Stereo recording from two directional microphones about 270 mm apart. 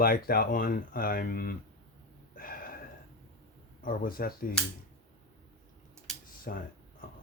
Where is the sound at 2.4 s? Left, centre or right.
Left.